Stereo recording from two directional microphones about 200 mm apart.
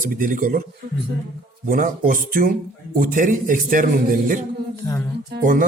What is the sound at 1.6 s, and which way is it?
Speech, 45° right (ahead or behind).